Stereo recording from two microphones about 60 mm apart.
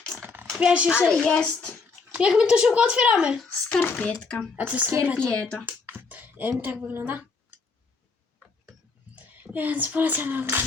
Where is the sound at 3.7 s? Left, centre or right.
Left.